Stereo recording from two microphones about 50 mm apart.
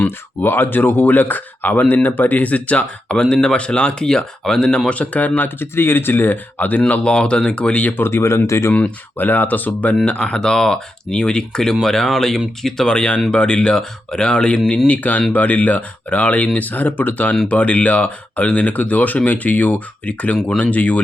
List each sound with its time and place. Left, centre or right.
0.0 s speech: left; by 4.8 s centre
4.9 s speech: left
5.5 s speech: left
6.8 s speech: left
7.9 s speech: left
9.1 s speech: left
10.1 s speech: centre
14.8 s speech: left